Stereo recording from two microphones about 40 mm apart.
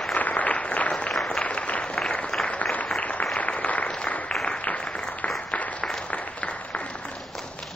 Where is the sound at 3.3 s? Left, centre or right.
Left.